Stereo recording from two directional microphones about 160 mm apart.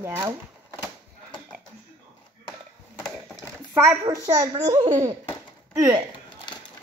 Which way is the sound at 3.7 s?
10° right (ahead or behind).